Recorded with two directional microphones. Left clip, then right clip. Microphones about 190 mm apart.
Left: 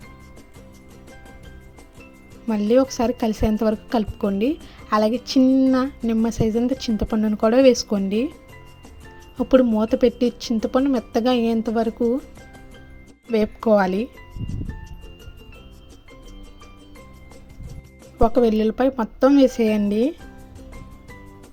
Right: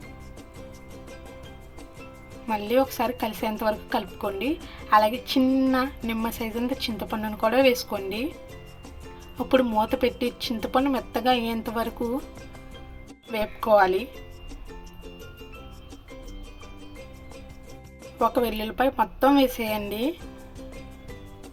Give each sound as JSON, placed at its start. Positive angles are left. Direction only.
{"t": 2.5, "sound": "a woman's voice", "side_deg": 50}
{"t": 4.9, "sound": "music", "side_deg": 50}
{"t": 5.3, "sound": "a woman's voice", "side_deg": 50}
{"t": 9.6, "sound": "a woman's voice", "side_deg": 50}
{"t": 13.3, "sound": "a woman's voice", "side_deg": 50}
{"t": 18.2, "sound": "a woman's voice", "side_deg": 50}